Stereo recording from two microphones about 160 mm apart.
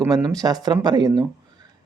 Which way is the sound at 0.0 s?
25° right (ahead or behind).